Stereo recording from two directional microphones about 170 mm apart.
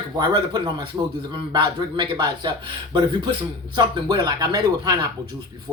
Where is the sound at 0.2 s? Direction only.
25° right (ahead or behind).